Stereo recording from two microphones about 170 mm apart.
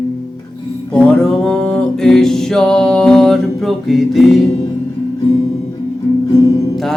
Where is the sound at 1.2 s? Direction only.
5° left (ahead or behind).